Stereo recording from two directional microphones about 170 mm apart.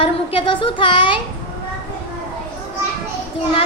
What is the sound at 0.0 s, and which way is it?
Child singing, 30° left (ahead or behind).